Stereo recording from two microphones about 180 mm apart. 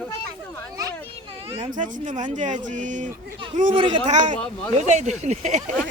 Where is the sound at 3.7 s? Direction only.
30° right (ahead or behind).